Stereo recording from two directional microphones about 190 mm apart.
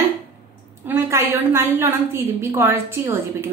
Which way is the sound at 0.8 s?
10° right (ahead or behind).